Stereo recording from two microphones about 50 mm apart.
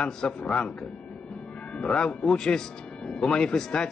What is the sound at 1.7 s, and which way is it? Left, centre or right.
A man's voice, left.